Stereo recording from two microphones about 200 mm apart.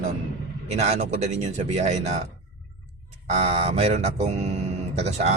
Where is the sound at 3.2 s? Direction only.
35° right (ahead or behind).